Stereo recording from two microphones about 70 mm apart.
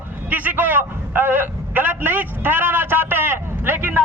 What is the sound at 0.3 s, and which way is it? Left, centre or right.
A man's voice, right.